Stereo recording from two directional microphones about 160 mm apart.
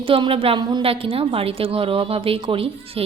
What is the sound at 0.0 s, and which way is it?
A woman's voice, 35° right (ahead or behind).